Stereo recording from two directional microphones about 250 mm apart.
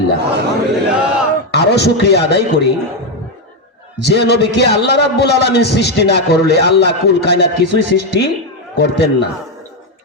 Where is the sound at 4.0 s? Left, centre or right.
Left.